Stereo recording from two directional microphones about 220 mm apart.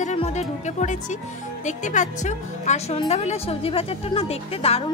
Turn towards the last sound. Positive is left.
turn(degrees=25)  # may be behind; listen again after turning